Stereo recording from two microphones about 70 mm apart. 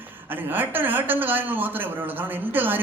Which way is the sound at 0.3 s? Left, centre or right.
Right.